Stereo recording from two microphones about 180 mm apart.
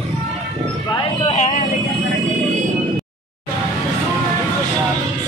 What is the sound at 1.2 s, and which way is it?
Vehicle, 40° left (ahead or behind).